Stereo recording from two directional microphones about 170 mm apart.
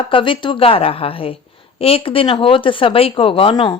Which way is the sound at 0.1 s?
30° left (ahead or behind).